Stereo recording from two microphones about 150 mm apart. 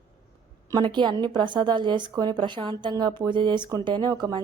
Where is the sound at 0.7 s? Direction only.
30° right (ahead or behind).